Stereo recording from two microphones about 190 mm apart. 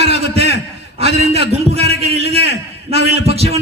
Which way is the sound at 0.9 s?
30° right (ahead or behind).